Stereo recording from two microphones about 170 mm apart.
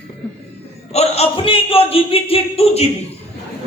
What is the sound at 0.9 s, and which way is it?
A man's voice, 40° left (ahead or behind).